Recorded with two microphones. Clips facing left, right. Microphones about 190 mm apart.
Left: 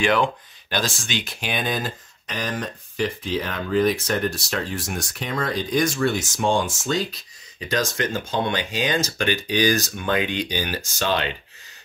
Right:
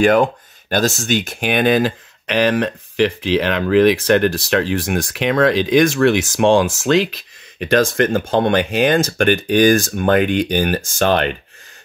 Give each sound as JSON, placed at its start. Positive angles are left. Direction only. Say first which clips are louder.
{"t": 0.0, "sound": "speech", "louder": "right 7 dB", "side_deg": -45}
{"t": 7.5, "sound": "speech", "louder": "right 9 dB", "side_deg": -60}